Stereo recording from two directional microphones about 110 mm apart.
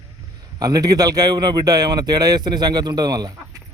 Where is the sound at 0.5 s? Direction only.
35° right (ahead or behind).